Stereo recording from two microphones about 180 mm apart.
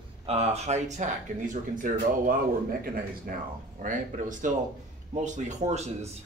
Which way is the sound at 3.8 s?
45° right (ahead or behind).